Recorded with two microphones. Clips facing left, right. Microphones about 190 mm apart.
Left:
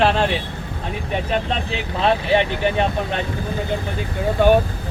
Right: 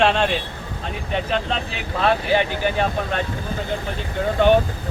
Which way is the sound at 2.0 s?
25° left (ahead or behind).